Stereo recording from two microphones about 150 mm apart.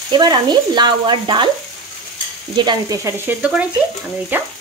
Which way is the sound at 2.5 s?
25° right (ahead or behind).